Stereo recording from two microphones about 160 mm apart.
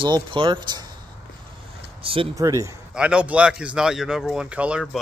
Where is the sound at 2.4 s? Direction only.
20° right (ahead or behind).